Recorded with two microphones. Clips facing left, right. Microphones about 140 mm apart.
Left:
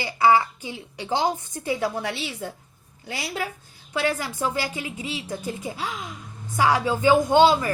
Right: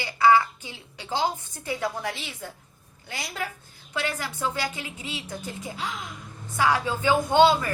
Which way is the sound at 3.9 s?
15° left (ahead or behind).